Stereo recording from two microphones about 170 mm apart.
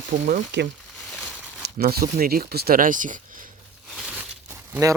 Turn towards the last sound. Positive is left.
turn(degrees=-15)  # may be behind; listen again after turning